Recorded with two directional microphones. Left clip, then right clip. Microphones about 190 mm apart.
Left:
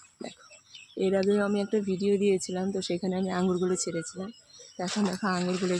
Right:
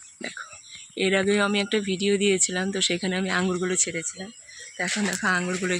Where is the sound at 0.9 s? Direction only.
Centre (ahead or behind).